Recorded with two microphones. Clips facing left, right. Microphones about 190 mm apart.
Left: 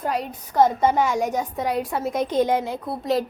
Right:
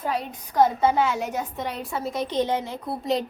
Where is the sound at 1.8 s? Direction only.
50° left (ahead or behind).